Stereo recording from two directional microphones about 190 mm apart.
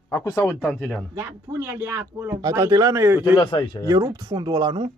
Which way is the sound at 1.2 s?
15° right (ahead or behind).